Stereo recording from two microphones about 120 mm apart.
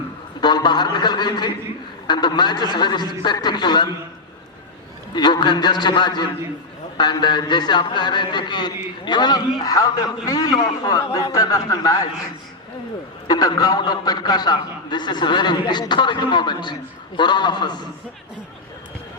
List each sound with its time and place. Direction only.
0.4 s speech: 40° left (ahead or behind)
5.1 s speech: 40° left (ahead or behind)
13.2 s speech: 35° left (ahead or behind)